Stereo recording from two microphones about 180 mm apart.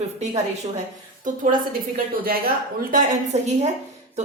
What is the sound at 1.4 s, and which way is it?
A woman's voice, 50° right (ahead or behind).